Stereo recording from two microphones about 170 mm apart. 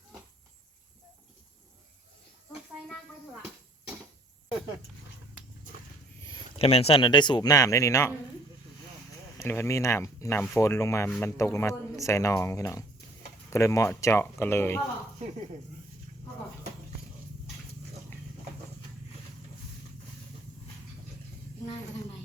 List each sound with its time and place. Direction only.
6.6 s speech: 40° left (ahead or behind); by 8.1 s 15° left (ahead or behind)
9.4 s speech: 15° left (ahead or behind)